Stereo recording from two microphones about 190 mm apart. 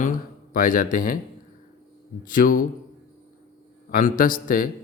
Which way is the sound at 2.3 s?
45° left (ahead or behind).